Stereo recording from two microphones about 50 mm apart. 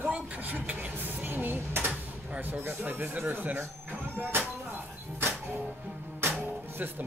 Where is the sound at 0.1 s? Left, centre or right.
Right.